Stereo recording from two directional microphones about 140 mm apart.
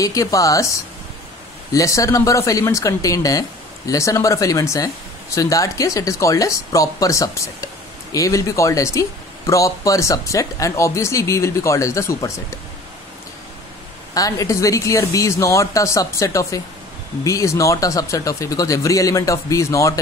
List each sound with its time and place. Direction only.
0.0 s speech: 25° left (ahead or behind)
1.7 s speech: 25° left (ahead or behind)
14.1 s speech: 25° left (ahead or behind)